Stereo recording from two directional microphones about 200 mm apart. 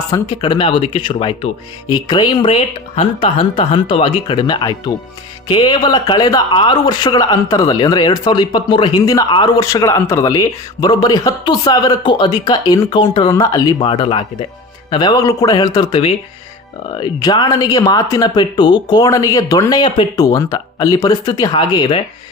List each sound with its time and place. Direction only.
0.1 s speech: 25° left (ahead or behind)